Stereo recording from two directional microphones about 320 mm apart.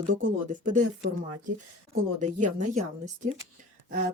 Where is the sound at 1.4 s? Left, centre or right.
Right.